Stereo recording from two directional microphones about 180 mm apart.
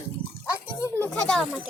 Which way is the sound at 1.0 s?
5° left (ahead or behind).